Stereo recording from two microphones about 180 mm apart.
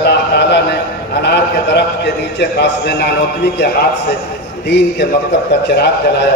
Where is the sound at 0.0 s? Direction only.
70° left (ahead or behind).